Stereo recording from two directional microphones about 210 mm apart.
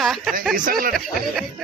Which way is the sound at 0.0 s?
Centre (ahead or behind).